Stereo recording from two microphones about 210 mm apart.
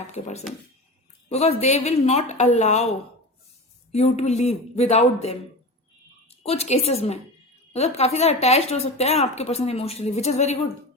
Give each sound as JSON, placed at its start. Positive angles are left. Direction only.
{"t": 0.1, "sound": "a woman's voice", "side_deg": 30}
{"t": 3.9, "sound": "a woman's voice", "side_deg": 30}
{"t": 6.4, "sound": "speech", "side_deg": 30}